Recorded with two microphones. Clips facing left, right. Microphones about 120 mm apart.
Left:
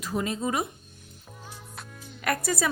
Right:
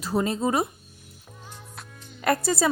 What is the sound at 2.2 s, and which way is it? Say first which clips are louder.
Speech: right 4 dB; 30° right (ahead or behind).